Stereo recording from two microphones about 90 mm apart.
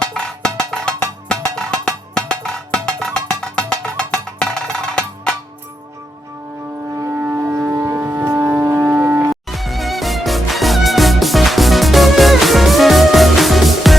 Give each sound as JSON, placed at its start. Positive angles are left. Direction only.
{"t": 0.0, "sound": "music", "side_deg": 10}
{"t": 7.1, "sound": "civil defense siren", "side_deg": -20}
{"t": 8.7, "sound": "a sound", "side_deg": -20}
{"t": 9.3, "sound": "music", "side_deg": 0}